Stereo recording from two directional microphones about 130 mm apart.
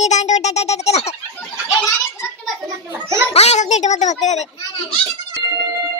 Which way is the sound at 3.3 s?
55° left (ahead or behind).